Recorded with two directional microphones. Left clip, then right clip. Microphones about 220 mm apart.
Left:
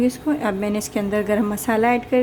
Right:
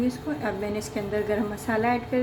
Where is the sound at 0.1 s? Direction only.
50° left (ahead or behind).